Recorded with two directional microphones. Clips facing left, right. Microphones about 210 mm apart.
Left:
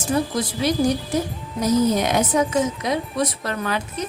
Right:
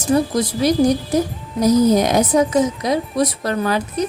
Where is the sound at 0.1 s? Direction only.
40° right (ahead or behind).